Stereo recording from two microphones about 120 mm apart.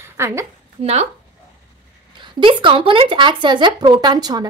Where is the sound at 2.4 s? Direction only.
45° right (ahead or behind).